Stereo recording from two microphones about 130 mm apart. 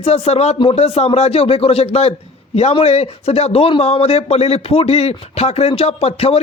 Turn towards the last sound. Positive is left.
turn(degrees=50)  # may be behind; listen again after turning